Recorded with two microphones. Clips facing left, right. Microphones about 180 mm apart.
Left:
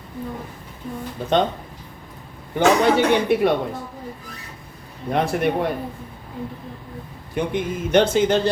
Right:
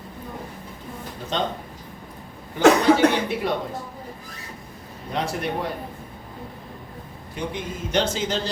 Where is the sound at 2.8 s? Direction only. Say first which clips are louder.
Left 1 dB; 60° left (ahead or behind).